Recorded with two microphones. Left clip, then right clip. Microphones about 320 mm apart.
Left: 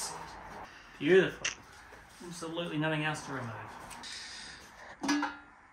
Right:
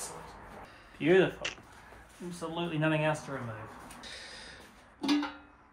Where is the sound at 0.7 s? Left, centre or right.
Centre.